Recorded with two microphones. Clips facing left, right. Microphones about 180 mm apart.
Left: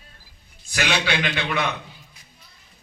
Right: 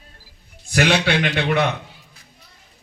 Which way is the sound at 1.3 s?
40° right (ahead or behind).